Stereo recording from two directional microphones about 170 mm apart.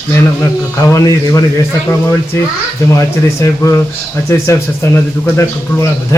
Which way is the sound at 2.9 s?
20° left (ahead or behind).